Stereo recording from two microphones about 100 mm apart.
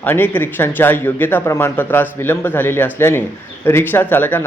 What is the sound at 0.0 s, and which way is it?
Speech, 20° left (ahead or behind).